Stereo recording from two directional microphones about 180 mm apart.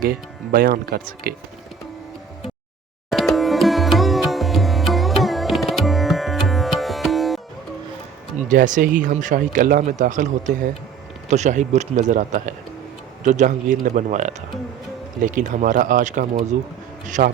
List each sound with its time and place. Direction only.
0.0 s speech: 55° right (ahead or behind)
3.1 s music: centre (ahead or behind)
8.4 s speech: 45° right (ahead or behind)